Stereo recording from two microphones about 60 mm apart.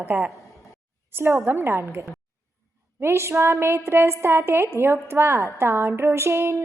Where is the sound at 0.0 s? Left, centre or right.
Right.